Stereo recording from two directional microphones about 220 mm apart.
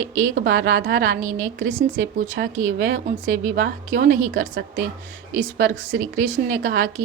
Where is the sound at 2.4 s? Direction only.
50° right (ahead or behind).